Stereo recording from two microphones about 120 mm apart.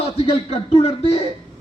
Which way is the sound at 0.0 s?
55° left (ahead or behind).